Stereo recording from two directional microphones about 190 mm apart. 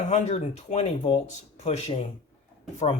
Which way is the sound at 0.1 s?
35° left (ahead or behind).